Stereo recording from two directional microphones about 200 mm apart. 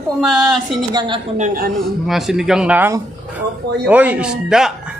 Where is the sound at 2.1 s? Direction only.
Centre (ahead or behind).